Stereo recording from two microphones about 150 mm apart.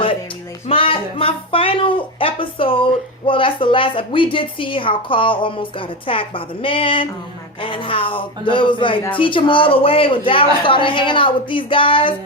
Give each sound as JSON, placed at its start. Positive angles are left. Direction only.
{"t": 0.7, "sound": "speech", "side_deg": 35}